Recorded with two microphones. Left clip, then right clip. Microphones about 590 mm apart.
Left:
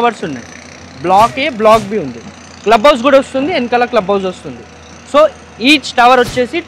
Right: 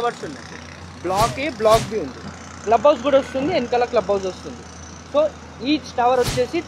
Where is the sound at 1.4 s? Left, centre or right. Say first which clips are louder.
Left 8 dB; left.